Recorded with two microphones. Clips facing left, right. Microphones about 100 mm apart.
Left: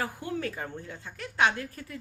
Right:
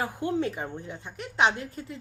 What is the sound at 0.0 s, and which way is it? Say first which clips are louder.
A woman's voice: right 5 dB; 25° right (ahead or behind).